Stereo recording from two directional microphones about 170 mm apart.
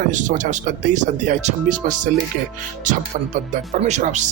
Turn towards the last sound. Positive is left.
turn(degrees=-45)  # may be behind; listen again after turning